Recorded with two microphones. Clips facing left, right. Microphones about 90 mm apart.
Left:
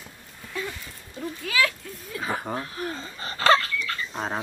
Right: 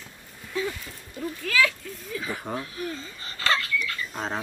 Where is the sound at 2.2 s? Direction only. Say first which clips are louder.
Left 4 dB; 50° left (ahead or behind).